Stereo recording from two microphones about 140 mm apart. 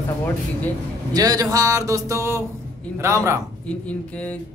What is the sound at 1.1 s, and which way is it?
Speech, 25° right (ahead or behind).